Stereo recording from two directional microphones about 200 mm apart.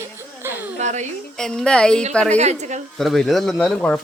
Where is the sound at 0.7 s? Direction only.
35° right (ahead or behind).